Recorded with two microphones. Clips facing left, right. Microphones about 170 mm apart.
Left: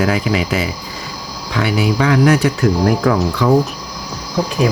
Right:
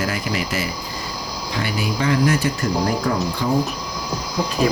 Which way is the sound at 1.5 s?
75° left (ahead or behind).